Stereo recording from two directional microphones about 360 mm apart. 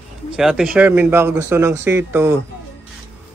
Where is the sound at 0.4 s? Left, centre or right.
Centre.